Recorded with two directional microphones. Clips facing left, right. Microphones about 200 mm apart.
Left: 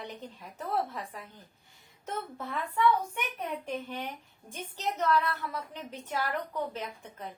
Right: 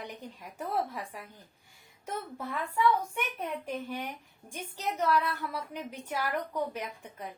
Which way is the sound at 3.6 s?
5° right (ahead or behind).